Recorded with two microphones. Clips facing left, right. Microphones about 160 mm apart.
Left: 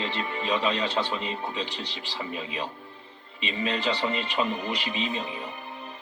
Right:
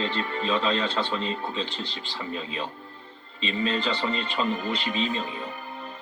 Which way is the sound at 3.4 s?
15° left (ahead or behind).